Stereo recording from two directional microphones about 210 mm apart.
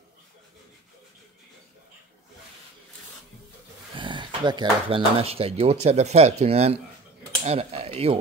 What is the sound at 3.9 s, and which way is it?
Speech, 25° right (ahead or behind).